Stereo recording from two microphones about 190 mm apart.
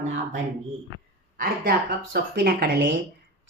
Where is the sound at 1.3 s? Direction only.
50° right (ahead or behind).